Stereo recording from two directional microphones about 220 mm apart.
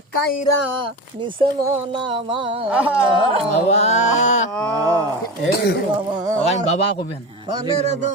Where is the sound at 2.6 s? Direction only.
5° right (ahead or behind).